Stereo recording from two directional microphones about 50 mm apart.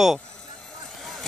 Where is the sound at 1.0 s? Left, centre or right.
Centre.